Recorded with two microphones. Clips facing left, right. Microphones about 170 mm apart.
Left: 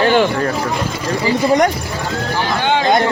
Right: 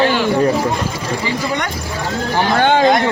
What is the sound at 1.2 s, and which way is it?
Speech, 35° left (ahead or behind).